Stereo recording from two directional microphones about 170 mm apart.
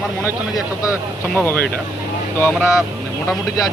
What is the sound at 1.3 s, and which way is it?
Speech, 10° left (ahead or behind).